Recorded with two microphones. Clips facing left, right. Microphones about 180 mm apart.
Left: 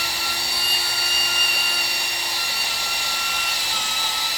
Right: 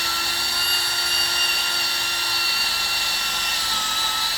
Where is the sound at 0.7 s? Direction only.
10° left (ahead or behind).